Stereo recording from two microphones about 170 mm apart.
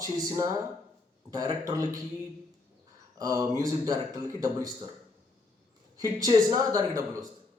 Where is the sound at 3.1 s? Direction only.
20° right (ahead or behind).